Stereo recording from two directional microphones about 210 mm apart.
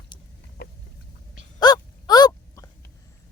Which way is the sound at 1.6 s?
20° left (ahead or behind).